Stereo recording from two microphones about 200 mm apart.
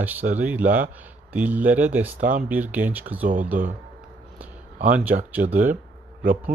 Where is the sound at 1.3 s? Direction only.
10° right (ahead or behind).